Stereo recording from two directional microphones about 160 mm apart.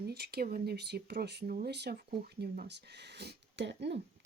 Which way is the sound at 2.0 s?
65° right (ahead or behind).